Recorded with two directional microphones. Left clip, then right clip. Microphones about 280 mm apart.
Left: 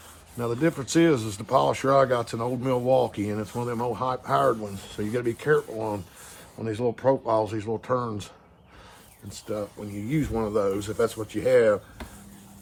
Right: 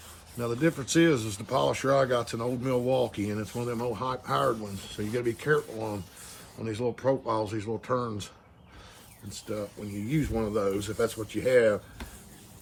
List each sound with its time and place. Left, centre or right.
0.3 s speech: left
9.5 s speech: left